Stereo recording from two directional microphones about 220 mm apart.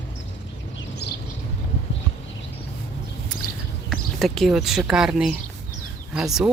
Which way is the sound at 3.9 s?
Centre (ahead or behind).